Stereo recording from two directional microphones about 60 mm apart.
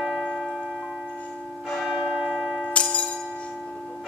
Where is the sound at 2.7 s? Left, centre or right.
Left.